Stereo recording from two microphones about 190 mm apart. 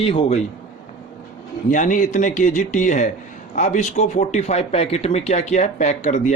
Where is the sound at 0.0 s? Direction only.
30° left (ahead or behind).